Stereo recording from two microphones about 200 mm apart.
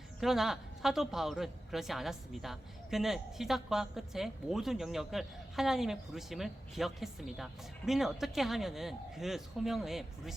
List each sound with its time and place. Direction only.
0.2 s a woman's voice: centre (ahead or behind)